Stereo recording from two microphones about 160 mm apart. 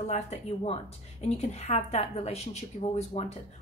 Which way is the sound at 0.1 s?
45° left (ahead or behind).